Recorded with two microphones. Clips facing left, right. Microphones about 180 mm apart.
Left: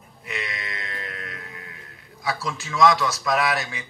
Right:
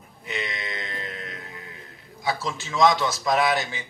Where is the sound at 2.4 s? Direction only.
25° right (ahead or behind).